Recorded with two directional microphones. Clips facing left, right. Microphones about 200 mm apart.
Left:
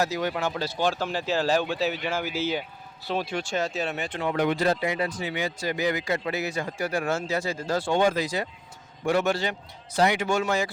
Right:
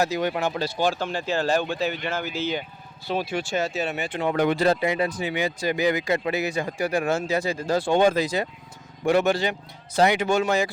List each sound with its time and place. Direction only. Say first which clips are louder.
0.0 s speech: right 3 dB; 20° right (ahead or behind)
0.9 s speech: right 1 dB; 5° left (ahead or behind)
4.6 s speech: right 3 dB; 25° right (ahead or behind)